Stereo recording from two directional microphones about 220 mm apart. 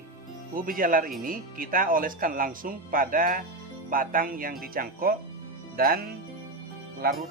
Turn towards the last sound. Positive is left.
turn(degrees=-40)  # may be behind; listen again after turning